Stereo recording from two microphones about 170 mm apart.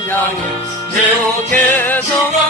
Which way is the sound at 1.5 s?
10° left (ahead or behind).